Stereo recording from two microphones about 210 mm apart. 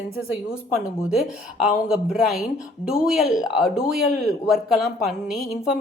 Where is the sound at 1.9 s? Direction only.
Centre (ahead or behind).